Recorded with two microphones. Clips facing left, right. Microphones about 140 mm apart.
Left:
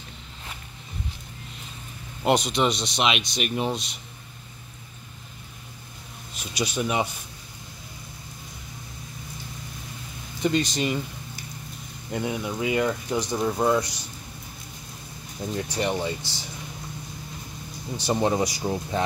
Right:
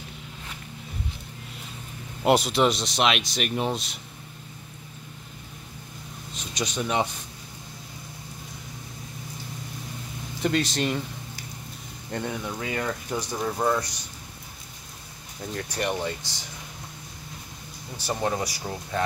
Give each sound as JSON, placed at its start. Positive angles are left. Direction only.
{"t": 2.2, "sound": "speech", "side_deg": -5}
{"t": 6.3, "sound": "speech", "side_deg": 5}
{"t": 10.4, "sound": "speech", "side_deg": 0}
{"t": 12.1, "sound": "speech", "side_deg": 10}
{"t": 15.5, "sound": "speech", "side_deg": 10}
{"t": 16.2, "sound": "speech", "side_deg": -15}
{"t": 18.2, "sound": "speech", "side_deg": 20}